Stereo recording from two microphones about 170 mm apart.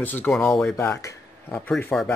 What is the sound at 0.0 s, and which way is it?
Speech, 10° left (ahead or behind).